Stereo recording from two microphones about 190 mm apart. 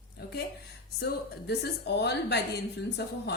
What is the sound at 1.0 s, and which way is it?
Speech, 60° left (ahead or behind).